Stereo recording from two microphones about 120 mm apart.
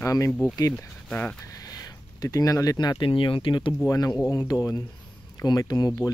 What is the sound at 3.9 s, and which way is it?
Speech, 30° left (ahead or behind).